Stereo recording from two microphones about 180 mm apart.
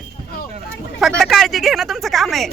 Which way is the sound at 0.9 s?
Centre (ahead or behind).